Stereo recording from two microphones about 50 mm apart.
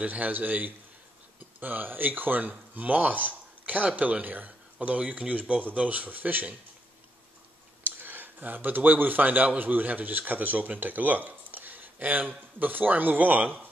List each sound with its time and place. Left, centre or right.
0.0 s speech: right
7.8 s speech: right